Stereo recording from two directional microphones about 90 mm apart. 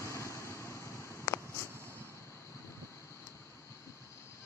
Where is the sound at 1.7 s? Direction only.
30° right (ahead or behind).